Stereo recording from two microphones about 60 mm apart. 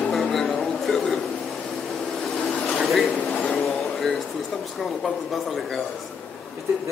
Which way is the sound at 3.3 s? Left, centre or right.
Centre.